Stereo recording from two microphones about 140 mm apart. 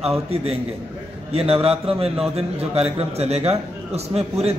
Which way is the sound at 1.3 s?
45° right (ahead or behind).